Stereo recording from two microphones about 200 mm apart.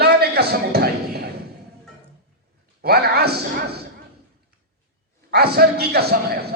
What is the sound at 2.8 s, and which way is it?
A man's voice, 50° right (ahead or behind).